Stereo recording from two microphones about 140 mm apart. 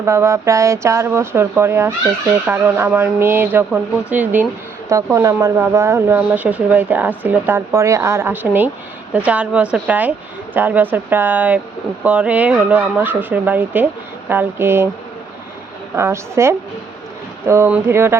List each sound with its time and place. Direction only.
0.0 s speech: 20° right (ahead or behind)
16.0 s speech: 20° right (ahead or behind)